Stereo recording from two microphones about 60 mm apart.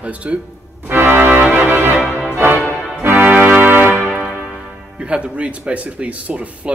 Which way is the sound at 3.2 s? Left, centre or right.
Right.